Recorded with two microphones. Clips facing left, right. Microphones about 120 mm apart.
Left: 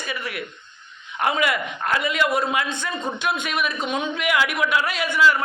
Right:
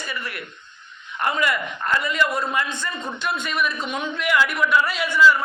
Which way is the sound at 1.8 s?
75° left (ahead or behind).